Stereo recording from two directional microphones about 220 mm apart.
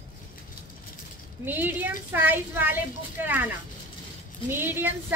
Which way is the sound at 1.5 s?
10° right (ahead or behind).